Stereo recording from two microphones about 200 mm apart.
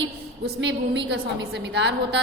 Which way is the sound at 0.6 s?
60° right (ahead or behind).